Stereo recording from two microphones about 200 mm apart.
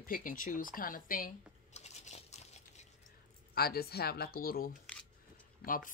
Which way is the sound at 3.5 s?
50° left (ahead or behind).